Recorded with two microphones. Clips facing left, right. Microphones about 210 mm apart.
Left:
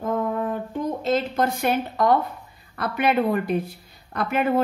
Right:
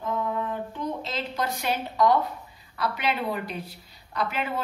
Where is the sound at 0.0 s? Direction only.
50° left (ahead or behind).